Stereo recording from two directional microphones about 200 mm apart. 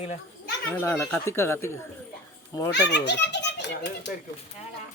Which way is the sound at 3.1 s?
60° left (ahead or behind).